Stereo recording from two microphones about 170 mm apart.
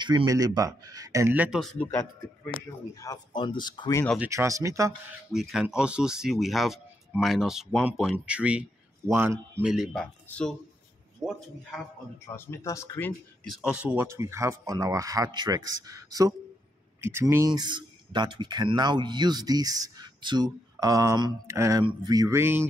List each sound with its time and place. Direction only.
0.0 s speech: 25° right (ahead or behind)
1.6 s a man's voice: 5° left (ahead or behind); by 4.0 s 25° left (ahead or behind)
4.2 s speech: 15° right (ahead or behind)
5.3 s speech: centre (ahead or behind)
10.2 s speech: 10° left (ahead or behind)
11.2 s speech: centre (ahead or behind)
12.3 s speech: 15° left (ahead or behind)
13.5 s speech: 5° right (ahead or behind)